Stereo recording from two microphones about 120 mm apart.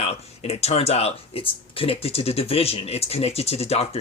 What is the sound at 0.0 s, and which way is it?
Speech, 60° left (ahead or behind).